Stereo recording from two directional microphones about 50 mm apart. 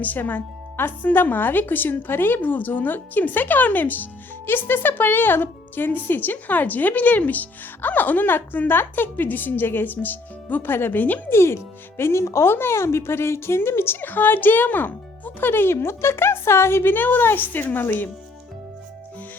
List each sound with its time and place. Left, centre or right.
0.0 s speech: left
11.3 s speech: left